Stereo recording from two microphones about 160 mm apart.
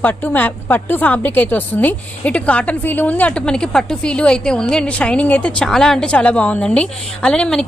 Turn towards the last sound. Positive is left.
turn(degrees=5)  # may be behind; listen again after turning